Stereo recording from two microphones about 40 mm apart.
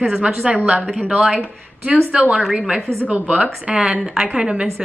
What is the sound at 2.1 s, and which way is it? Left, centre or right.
Speech, right.